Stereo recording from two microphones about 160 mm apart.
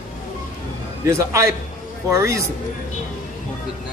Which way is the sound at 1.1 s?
20° right (ahead or behind).